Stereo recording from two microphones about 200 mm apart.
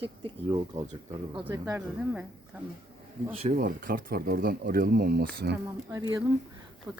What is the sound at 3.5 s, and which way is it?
Speech, 45° right (ahead or behind).